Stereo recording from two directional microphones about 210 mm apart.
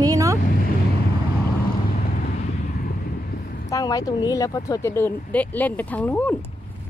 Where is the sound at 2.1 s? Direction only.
40° left (ahead or behind).